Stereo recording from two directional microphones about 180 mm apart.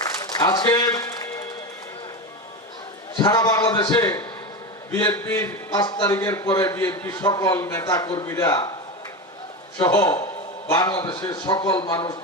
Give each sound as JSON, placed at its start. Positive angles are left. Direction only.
{"t": 0.0, "sound": "music", "side_deg": 20}
{"t": 3.2, "sound": "a man's voice", "side_deg": 20}
{"t": 9.7, "sound": "a man's voice", "side_deg": 20}